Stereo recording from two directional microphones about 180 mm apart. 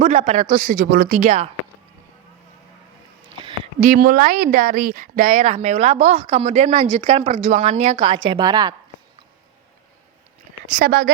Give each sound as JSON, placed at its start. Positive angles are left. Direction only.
{"t": 0.0, "sound": "speech", "side_deg": -40}
{"t": 0.5, "sound": "speech", "side_deg": -55}
{"t": 3.3, "sound": "a sound", "side_deg": -30}
{"t": 3.8, "sound": "speech", "side_deg": -50}
{"t": 10.7, "sound": "speech", "side_deg": -50}